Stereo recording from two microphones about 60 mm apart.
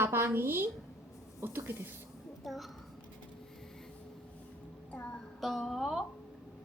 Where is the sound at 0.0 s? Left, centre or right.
Right.